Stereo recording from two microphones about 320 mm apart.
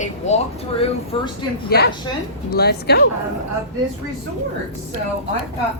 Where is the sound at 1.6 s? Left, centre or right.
Left.